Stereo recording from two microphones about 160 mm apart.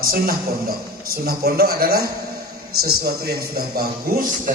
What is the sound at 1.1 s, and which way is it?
A man's voice, 70° right (ahead or behind).